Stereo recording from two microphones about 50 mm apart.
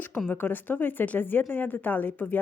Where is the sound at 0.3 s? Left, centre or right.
Left.